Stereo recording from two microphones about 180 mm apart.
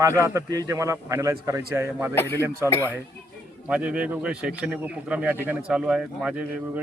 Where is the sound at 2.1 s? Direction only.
15° left (ahead or behind).